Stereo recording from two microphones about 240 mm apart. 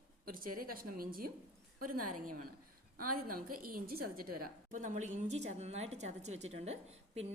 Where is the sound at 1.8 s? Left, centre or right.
Right.